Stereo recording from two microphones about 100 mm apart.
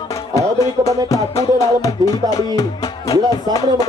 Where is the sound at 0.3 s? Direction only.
35° left (ahead or behind).